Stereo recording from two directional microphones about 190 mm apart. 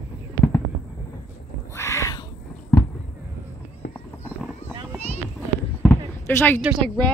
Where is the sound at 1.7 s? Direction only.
15° left (ahead or behind).